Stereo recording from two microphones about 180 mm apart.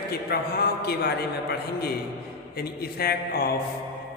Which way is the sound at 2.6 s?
60° left (ahead or behind).